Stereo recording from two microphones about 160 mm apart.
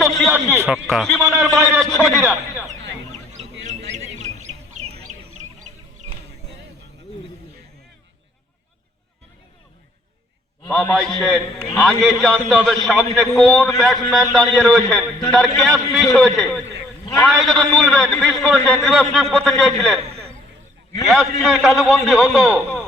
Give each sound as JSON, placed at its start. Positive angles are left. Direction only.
{"t": 0.0, "sound": "a sound", "side_deg": 0}
{"t": 0.7, "sound": "a man's voice", "side_deg": 0}
{"t": 1.2, "sound": "a man's voice", "side_deg": -15}
{"t": 1.5, "sound": "a man's voice", "side_deg": 0}
{"t": 3.3, "sound": "bird", "side_deg": -50}
{"t": 10.7, "sound": "a man's voice", "side_deg": 5}